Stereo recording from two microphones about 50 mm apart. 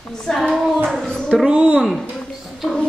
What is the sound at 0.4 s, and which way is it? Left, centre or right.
Hands, centre.